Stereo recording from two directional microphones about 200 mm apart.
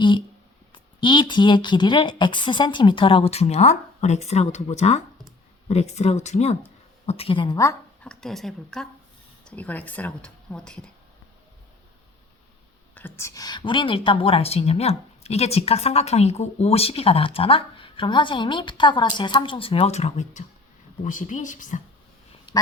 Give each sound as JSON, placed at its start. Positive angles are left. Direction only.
{"t": 0.7, "sound": "a woman's voice", "side_deg": 25}
{"t": 8.0, "sound": "speech", "side_deg": 5}
{"t": 12.9, "sound": "a woman's voice", "side_deg": 10}
{"t": 22.5, "sound": "speech", "side_deg": 25}